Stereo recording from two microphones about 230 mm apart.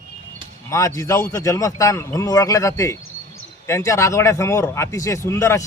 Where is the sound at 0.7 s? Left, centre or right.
Centre.